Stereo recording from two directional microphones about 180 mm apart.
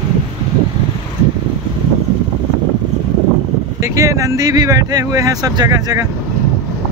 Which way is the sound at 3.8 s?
20° right (ahead or behind).